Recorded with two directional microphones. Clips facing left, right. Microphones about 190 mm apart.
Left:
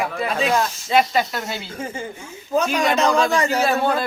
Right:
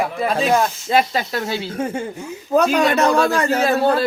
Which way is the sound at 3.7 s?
35° right (ahead or behind).